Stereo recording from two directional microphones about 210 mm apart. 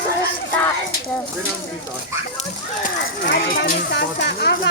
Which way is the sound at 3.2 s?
45° left (ahead or behind).